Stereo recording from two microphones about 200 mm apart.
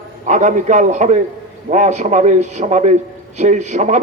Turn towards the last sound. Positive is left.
turn(degrees=-35)  # may be behind; listen again after turning